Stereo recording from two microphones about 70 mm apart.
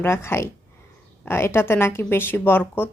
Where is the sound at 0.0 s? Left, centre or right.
Left.